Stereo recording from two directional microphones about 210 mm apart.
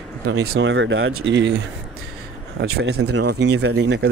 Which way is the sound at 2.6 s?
55° right (ahead or behind).